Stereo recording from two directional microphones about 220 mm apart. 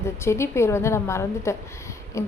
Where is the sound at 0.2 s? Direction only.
10° left (ahead or behind).